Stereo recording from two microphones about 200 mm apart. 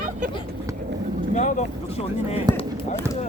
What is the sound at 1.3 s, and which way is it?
Speech, 35° left (ahead or behind).